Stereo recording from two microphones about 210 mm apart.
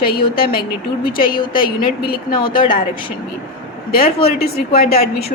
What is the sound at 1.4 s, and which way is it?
Speech, 20° left (ahead or behind).